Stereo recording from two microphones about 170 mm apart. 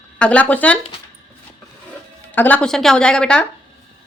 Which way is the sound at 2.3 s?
10° left (ahead or behind).